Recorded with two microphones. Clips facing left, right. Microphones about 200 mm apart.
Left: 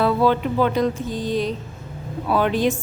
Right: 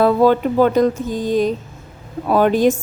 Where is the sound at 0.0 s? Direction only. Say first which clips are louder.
Right 5 dB; 45° right (ahead or behind).